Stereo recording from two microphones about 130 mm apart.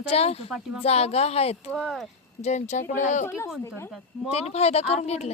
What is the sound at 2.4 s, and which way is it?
Speech, 65° left (ahead or behind).